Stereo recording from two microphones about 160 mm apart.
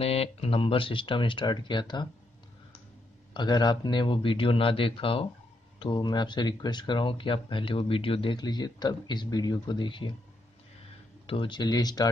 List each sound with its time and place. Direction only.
0.0 s speech: 40° left (ahead or behind)
3.3 s speech: 25° left (ahead or behind)
11.2 s speech: 30° left (ahead or behind)